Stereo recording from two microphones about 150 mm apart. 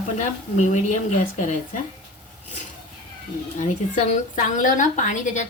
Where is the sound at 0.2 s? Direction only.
50° left (ahead or behind).